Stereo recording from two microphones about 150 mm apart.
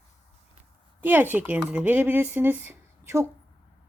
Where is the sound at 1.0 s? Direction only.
15° right (ahead or behind).